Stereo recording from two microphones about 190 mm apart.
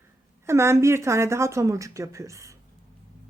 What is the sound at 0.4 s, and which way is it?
A woman's voice, 15° right (ahead or behind).